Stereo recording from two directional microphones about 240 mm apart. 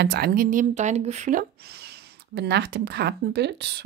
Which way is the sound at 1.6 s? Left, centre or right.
Right.